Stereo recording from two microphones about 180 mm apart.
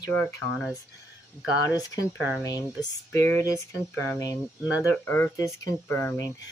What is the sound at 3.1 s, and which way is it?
Speech, 15° left (ahead or behind).